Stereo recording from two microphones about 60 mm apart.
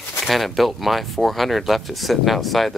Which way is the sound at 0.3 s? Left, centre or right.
Centre.